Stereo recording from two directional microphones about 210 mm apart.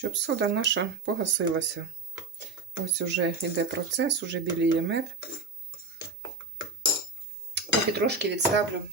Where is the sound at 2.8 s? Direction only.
55° right (ahead or behind).